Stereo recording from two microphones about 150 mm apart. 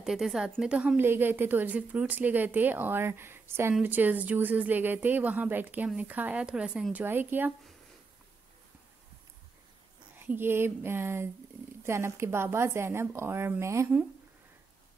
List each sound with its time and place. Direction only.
0.0 s speech: centre (ahead or behind)
10.1 s speech: 15° right (ahead or behind)